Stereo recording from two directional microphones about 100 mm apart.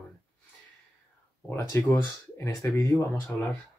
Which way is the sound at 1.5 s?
30° left (ahead or behind).